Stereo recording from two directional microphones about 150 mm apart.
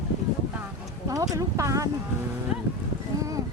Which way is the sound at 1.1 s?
20° right (ahead or behind).